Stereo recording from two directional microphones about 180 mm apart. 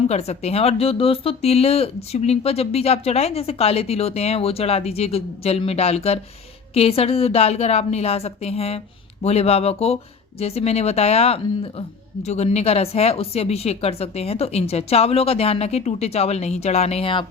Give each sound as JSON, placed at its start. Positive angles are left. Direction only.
{"t": 0.1, "sound": "speech", "side_deg": 35}